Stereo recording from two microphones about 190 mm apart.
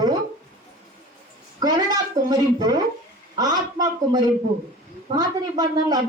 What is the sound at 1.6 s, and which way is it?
A woman's voice, 20° right (ahead or behind).